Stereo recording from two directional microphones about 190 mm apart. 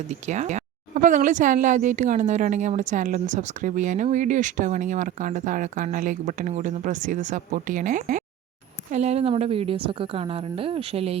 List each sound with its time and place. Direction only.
0.1 s a woman's voice: 40° right (ahead or behind)